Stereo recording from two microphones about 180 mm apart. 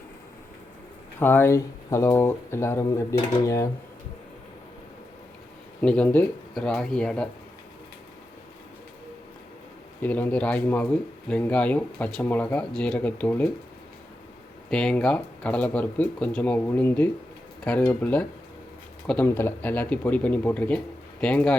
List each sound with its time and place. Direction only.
1.2 s speech: 10° left (ahead or behind)
5.8 s speech: 5° left (ahead or behind)
10.0 s speech: 10° left (ahead or behind)
14.7 s speech: 5° left (ahead or behind)